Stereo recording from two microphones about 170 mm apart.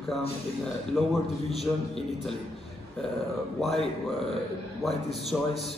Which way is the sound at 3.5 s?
Centre (ahead or behind).